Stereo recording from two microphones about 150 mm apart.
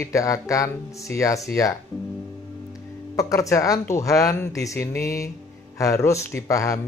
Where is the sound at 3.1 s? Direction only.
20° left (ahead or behind).